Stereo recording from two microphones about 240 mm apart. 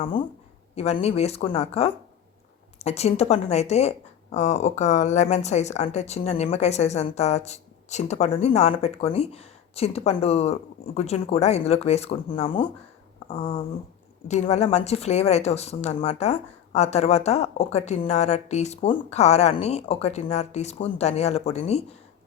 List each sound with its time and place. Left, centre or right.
0.8 s a woman's voice: left